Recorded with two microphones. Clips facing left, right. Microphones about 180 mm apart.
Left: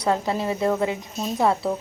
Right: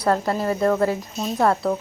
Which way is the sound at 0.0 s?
Centre (ahead or behind).